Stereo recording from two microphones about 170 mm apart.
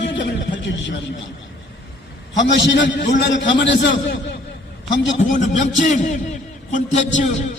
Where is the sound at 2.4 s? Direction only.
90° left.